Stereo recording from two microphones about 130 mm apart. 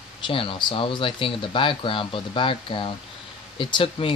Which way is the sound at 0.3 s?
40° left (ahead or behind).